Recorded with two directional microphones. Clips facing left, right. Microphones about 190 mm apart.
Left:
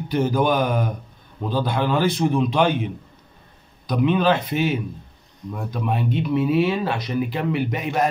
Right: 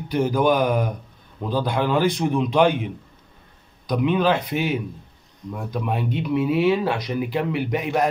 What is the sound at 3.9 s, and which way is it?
Speech, 10° right (ahead or behind).